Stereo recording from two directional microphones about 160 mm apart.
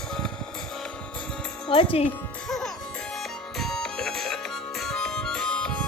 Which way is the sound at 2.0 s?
5° left (ahead or behind).